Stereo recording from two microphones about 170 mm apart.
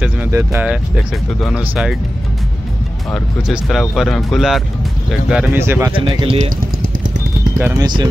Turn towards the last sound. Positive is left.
turn(degrees=-15)  # may be behind; listen again after turning